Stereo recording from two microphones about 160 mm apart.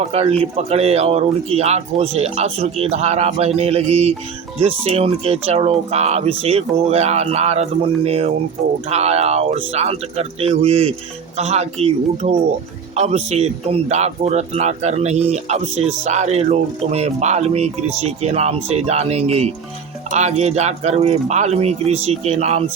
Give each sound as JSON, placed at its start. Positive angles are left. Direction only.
{"t": 0.0, "sound": "speech", "side_deg": -40}